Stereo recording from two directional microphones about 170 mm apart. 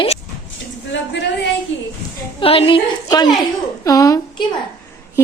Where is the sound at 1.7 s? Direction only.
90° left.